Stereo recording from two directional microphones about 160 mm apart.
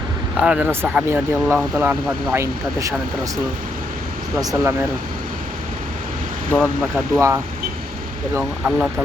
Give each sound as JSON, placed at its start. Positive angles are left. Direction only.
{"t": 0.3, "sound": "speech", "side_deg": -10}
{"t": 4.4, "sound": "speech", "side_deg": -20}
{"t": 6.5, "sound": "speech", "side_deg": 10}
{"t": 6.9, "sound": "speech", "side_deg": -15}